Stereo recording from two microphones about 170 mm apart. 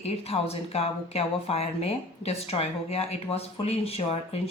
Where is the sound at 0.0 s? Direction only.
35° left (ahead or behind).